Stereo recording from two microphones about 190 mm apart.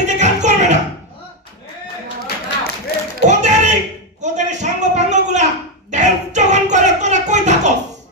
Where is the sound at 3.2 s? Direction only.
40° right (ahead or behind).